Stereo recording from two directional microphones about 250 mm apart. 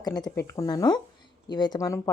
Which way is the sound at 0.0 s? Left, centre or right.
Centre.